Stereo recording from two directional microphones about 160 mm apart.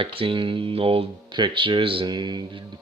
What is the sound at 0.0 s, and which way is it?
Speech, 35° right (ahead or behind).